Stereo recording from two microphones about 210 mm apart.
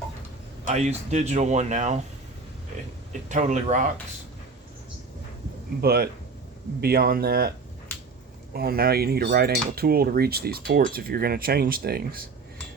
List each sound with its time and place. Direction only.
0.6 s speech: 35° right (ahead or behind)
3.1 s speech: 35° right (ahead or behind)
5.8 s cutlery: 50° right (ahead or behind)
8.5 s cutlery: 50° right (ahead or behind)